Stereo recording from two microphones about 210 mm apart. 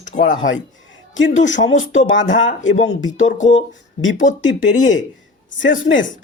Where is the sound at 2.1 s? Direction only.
60° left (ahead or behind).